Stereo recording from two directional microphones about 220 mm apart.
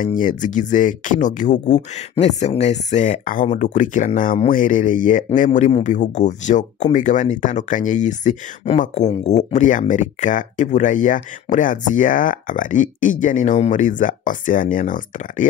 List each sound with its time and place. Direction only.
0.0 s speech: 35° left (ahead or behind)